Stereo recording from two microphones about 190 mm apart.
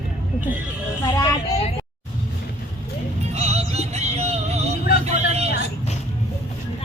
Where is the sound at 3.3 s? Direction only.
35° right (ahead or behind).